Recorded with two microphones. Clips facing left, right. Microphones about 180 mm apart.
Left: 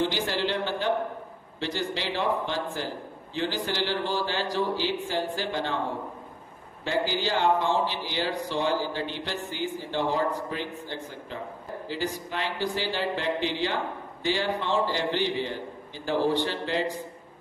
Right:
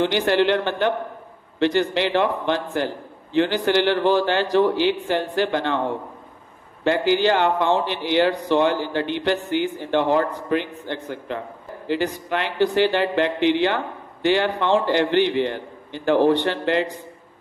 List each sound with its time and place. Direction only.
0.0 s a man's voice: 65° right (ahead or behind)
6.8 s a man's voice: 65° right (ahead or behind)